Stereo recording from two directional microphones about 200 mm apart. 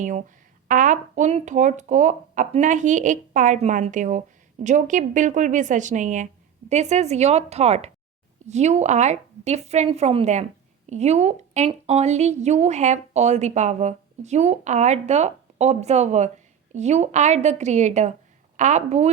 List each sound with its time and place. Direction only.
0.0 s a woman's voice: 40° right (ahead or behind)